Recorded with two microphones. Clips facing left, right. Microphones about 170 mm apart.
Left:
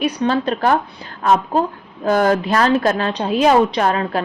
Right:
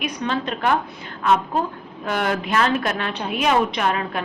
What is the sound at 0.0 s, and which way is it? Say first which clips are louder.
A woman's voice: left 7 dB; 35° left (ahead or behind).